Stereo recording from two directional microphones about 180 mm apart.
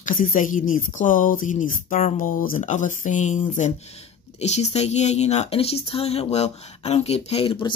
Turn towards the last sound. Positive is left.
turn(degrees=30)  # may be behind; listen again after turning